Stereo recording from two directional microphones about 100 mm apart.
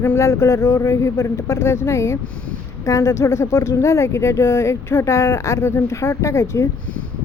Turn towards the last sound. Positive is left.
turn(degrees=30)  # may be behind; listen again after turning